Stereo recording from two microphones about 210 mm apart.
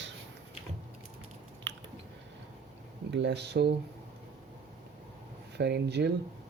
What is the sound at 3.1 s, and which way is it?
Speech, 55° right (ahead or behind).